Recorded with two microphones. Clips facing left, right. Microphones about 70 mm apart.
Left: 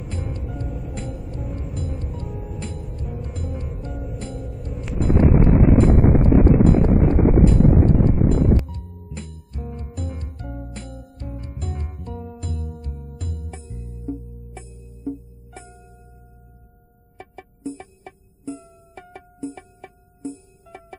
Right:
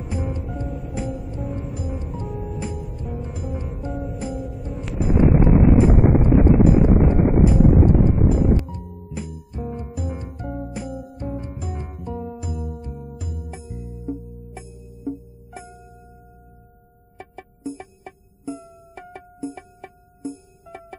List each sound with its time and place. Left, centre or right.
0.1 s music: centre
0.5 s music: centre
17.2 s music: centre